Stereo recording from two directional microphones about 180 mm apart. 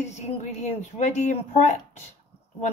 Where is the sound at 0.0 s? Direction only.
40° left (ahead or behind).